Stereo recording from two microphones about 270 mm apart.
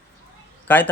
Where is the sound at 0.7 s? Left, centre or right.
Centre.